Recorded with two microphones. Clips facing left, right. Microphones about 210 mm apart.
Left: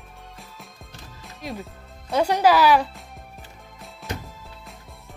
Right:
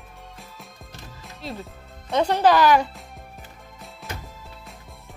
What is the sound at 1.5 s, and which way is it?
Speech, centre (ahead or behind).